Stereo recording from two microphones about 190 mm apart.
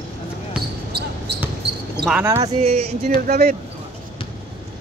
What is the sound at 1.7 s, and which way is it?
Basketball bounce, 65° right (ahead or behind).